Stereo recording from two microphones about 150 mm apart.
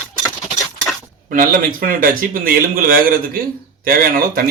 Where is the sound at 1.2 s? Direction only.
70° right (ahead or behind).